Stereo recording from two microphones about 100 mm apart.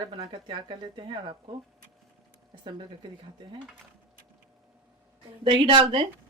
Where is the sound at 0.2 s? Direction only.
55° right (ahead or behind).